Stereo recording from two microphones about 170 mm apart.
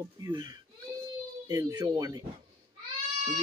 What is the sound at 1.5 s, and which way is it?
Speech, 20° right (ahead or behind).